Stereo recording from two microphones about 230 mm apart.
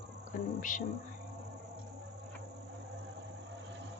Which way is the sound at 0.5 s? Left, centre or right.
Left.